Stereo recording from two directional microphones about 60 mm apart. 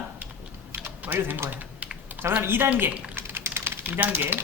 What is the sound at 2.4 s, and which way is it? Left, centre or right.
Speech, right.